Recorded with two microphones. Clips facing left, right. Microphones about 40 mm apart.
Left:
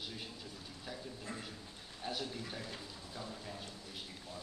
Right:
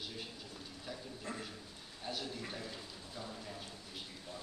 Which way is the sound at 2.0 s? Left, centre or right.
Centre.